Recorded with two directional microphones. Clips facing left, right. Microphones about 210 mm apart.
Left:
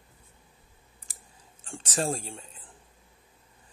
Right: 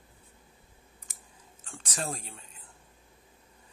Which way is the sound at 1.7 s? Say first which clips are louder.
Left 7 dB; 30° left (ahead or behind).